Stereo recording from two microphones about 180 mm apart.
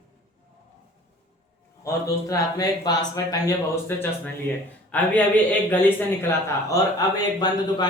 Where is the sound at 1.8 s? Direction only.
15° left (ahead or behind).